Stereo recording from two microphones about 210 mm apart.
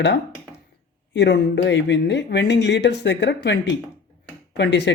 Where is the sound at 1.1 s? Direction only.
55° left (ahead or behind).